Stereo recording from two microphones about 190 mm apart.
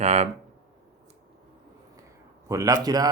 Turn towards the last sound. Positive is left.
turn(degrees=-20)  # may be behind; listen again after turning